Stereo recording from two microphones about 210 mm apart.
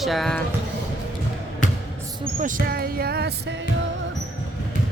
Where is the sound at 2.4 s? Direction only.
40° right (ahead or behind).